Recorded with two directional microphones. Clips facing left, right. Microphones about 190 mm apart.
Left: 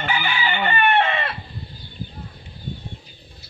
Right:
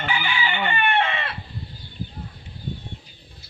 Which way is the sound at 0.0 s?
45° left (ahead or behind).